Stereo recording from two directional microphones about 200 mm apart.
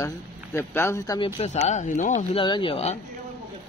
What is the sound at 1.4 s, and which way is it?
Speech, 35° left (ahead or behind).